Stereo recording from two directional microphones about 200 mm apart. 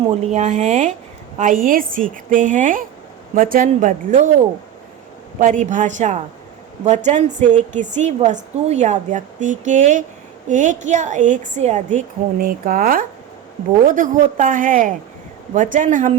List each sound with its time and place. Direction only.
0.2 s a woman's voice: 35° right (ahead or behind)
5.4 s a woman's voice: 40° right (ahead or behind)